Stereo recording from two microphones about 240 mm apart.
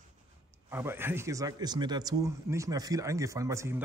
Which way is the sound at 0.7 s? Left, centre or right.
Centre.